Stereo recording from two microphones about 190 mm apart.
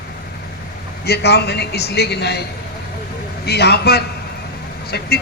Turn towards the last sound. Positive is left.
turn(degrees=55)  # may be behind; listen again after turning